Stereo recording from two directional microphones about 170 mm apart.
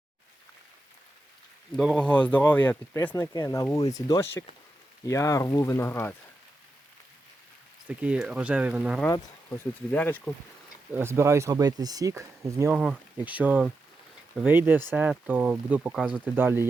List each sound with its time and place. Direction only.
1.7 s speech: centre (ahead or behind)
7.9 s speech: 5° right (ahead or behind)
9.9 s speech: 10° left (ahead or behind)
10.9 s speech: 15° right (ahead or behind)
12.7 s speech: 5° right (ahead or behind)